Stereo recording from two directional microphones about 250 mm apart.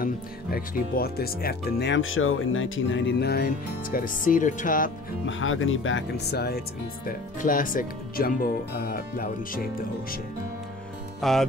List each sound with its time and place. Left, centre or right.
0.0 s speech: left
5.2 s speech: left
11.1 s speech: centre